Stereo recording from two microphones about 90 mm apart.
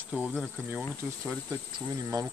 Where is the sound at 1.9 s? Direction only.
40° right (ahead or behind).